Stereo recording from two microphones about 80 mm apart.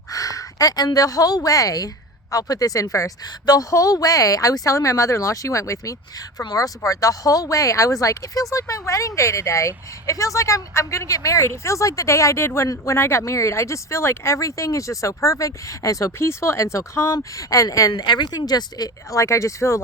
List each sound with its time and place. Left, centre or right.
0.1 s a woman's voice: left
3.2 s speech: left
17.9 s speech: left
19.2 s speech: left